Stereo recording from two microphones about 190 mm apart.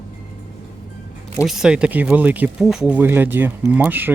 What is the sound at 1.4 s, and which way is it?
Speech, 5° right (ahead or behind).